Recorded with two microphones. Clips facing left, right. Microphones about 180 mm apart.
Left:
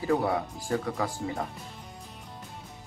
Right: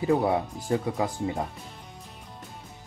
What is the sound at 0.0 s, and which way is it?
Speech, 20° right (ahead or behind).